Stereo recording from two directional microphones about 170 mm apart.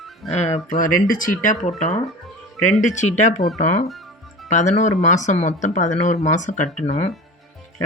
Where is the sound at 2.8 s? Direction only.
45° left (ahead or behind).